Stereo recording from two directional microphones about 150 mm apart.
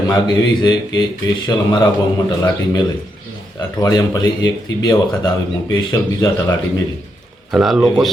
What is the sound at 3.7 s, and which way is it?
Speech, 25° left (ahead or behind).